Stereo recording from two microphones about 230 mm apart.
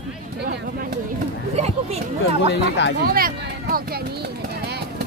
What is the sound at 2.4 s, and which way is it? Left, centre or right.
Speech, left.